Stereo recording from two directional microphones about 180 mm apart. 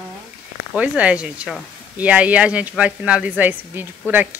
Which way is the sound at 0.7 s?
5° right (ahead or behind).